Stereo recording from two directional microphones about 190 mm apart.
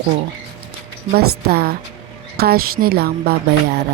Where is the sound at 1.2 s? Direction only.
55° right (ahead or behind).